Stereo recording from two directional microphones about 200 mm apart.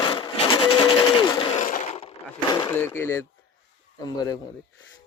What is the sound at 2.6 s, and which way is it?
Speech, 15° left (ahead or behind).